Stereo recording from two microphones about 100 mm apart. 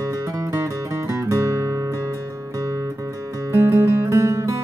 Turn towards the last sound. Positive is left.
turn(degrees=-30)  # may be behind; listen again after turning